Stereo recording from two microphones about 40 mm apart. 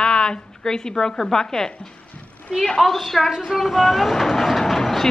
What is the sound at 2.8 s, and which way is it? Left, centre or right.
A woman's voice, centre.